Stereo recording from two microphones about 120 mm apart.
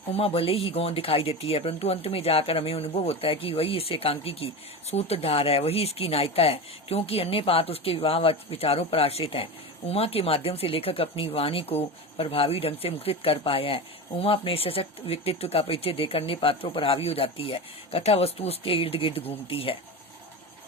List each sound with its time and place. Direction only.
0.1 s speech: 55° left (ahead or behind)